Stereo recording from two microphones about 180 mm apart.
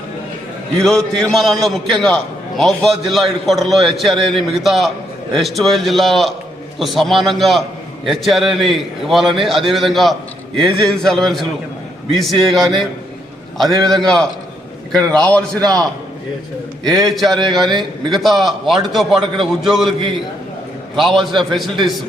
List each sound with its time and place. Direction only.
0.8 s a man's voice: 5° left (ahead or behind)
15.6 s a man's voice: 20° right (ahead or behind)
16.8 s a man's voice: centre (ahead or behind)
20.9 s a man's voice: centre (ahead or behind)